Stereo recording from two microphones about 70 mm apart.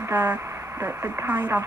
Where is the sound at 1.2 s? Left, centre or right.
Right.